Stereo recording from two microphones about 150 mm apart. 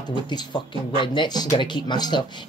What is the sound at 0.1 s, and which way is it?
Speech, 30° left (ahead or behind).